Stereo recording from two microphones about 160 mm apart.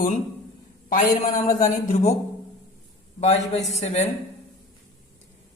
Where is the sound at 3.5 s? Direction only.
45° left (ahead or behind).